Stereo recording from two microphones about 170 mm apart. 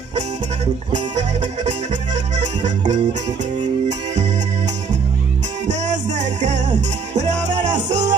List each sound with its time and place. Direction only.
0.9 s music: 45° right (ahead or behind)
5.7 s music: 45° right (ahead or behind)